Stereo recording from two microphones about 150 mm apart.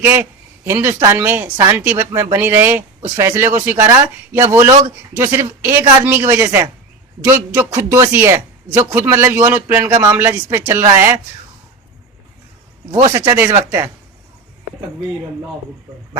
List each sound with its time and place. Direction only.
0.0 s a man's voice: 15° right (ahead or behind)
13.1 s speech: 20° right (ahead or behind)